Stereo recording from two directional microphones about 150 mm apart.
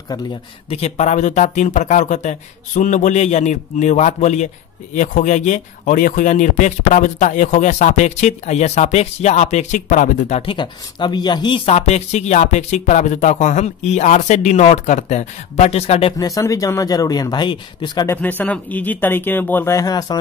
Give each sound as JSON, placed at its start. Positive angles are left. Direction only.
{"t": 0.7, "sound": "speech", "side_deg": 45}
{"t": 10.4, "sound": "speech", "side_deg": 35}
{"t": 16.2, "sound": "speech", "side_deg": 25}
{"t": 18.0, "sound": "speech", "side_deg": 15}